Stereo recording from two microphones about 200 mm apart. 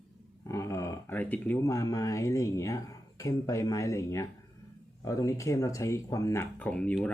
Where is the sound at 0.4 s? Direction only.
15° left (ahead or behind).